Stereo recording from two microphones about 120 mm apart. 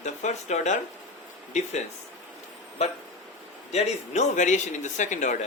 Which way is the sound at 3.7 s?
75° left (ahead or behind).